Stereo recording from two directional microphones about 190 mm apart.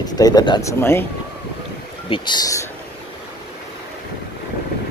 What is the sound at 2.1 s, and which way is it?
Speech, 25° left (ahead or behind).